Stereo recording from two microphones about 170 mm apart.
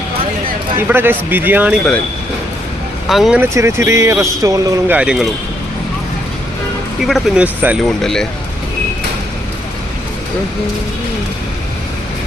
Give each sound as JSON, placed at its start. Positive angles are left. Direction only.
{"t": 0.8, "sound": "speech", "side_deg": -10}
{"t": 3.1, "sound": "speech", "side_deg": 0}
{"t": 4.9, "sound": "speech", "side_deg": -5}
{"t": 7.0, "sound": "speech", "side_deg": -5}
{"t": 7.9, "sound": "speech", "side_deg": 5}